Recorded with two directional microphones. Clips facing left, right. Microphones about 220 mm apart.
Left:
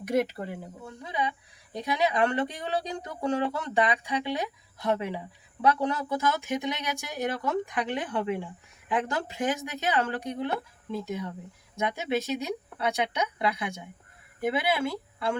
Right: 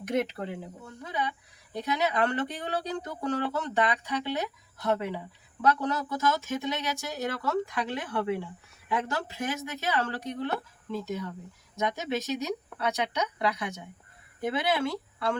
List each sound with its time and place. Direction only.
0.0 s speech: 10° left (ahead or behind)
11.8 s speech: 15° left (ahead or behind)